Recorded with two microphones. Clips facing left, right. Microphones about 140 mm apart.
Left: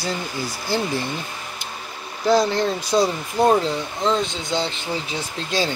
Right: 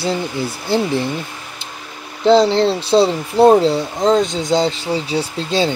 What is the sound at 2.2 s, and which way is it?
Speech, 30° right (ahead or behind).